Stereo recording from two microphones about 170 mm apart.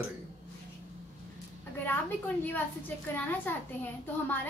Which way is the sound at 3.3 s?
10° left (ahead or behind).